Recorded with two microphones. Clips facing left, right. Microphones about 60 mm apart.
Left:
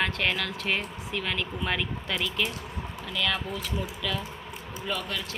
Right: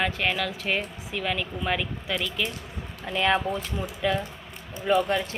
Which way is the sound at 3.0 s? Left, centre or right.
Right.